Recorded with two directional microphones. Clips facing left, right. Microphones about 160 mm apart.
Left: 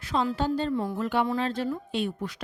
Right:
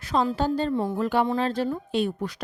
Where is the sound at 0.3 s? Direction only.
40° right (ahead or behind).